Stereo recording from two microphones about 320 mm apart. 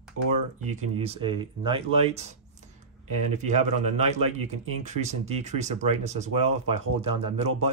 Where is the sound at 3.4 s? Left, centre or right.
Right.